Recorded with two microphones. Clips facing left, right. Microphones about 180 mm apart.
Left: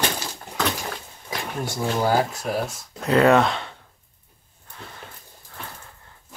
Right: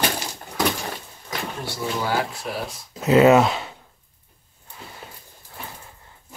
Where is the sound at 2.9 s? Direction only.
5° right (ahead or behind).